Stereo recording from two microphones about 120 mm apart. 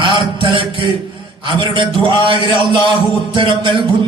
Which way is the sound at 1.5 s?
40° right (ahead or behind).